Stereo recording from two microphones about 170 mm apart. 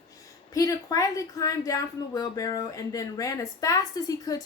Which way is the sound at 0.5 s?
20° left (ahead or behind).